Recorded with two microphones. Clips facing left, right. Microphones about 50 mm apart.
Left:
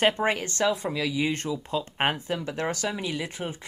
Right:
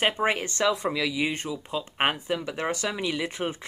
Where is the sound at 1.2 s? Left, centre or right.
Centre; by 3.6 s right.